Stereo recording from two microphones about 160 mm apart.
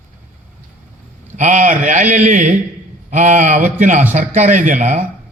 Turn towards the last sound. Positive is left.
turn(degrees=-50)  # may be behind; listen again after turning